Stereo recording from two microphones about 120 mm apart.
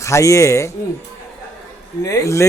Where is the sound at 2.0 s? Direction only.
25° left (ahead or behind).